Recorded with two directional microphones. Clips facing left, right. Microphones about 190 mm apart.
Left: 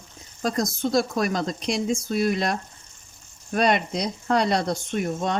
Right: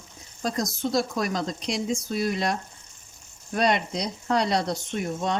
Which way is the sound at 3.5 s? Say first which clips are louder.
Left 2 dB; 55° left (ahead or behind).